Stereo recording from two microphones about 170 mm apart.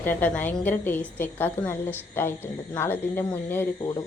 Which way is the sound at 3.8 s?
25° left (ahead or behind).